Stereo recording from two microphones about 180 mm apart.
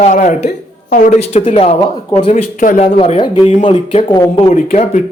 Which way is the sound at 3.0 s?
30° left (ahead or behind).